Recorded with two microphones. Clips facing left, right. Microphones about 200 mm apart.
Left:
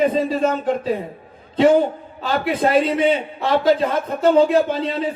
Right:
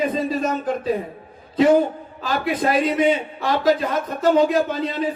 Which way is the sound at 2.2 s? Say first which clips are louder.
Left 2 dB; 30° left (ahead or behind).